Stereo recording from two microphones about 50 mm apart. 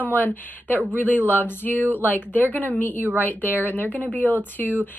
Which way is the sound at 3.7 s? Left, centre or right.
Left.